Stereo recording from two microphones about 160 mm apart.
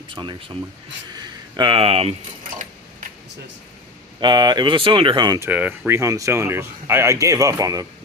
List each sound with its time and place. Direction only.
0.1 s speech: 30° right (ahead or behind)
4.2 s speech: 25° right (ahead or behind)
5.5 s speech: 10° right (ahead or behind)
6.0 s speech: 20° right (ahead or behind)